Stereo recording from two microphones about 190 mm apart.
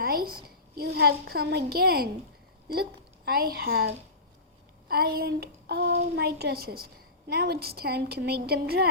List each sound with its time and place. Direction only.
0.0 s a sound: 50° right (ahead or behind)
0.4 s a woman's voice: 55° right (ahead or behind)
3.2 s a woman's voice: 55° right (ahead or behind)